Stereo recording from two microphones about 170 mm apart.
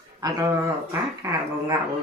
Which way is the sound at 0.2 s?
20° right (ahead or behind).